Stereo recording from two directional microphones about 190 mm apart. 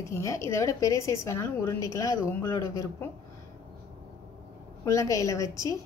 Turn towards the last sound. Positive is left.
turn(degrees=15)  # may be behind; listen again after turning